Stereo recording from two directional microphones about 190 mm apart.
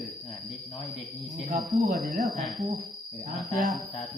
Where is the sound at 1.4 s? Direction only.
45° right (ahead or behind).